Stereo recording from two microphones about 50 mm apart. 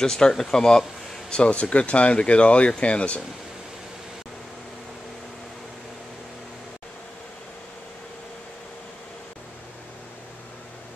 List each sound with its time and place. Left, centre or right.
0.0 s speech: centre
1.3 s speech: left